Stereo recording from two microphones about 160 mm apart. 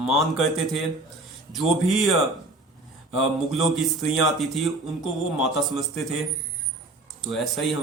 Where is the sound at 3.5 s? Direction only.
Centre (ahead or behind).